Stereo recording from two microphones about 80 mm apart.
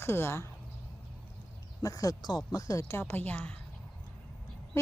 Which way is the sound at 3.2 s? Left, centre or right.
Centre.